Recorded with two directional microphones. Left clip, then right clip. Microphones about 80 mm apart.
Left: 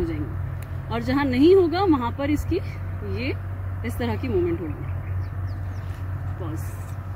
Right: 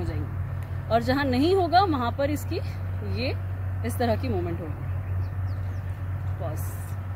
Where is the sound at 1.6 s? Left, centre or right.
Right.